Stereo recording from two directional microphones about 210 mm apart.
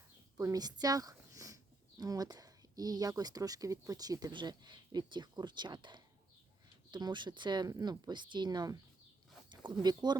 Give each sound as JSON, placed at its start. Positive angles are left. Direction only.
{"t": 0.3, "sound": "speech", "side_deg": -15}